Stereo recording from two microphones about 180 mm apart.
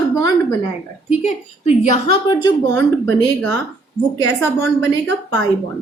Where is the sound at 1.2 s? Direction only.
40° left (ahead or behind).